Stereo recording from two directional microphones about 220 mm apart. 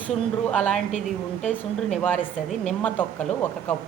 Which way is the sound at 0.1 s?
5° left (ahead or behind).